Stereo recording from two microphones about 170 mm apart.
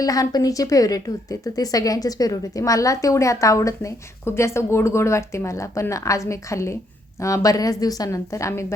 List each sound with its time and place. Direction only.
0.0 s a woman's voice: 20° left (ahead or behind)